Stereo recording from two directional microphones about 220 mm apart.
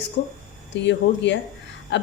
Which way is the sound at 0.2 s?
50° left (ahead or behind).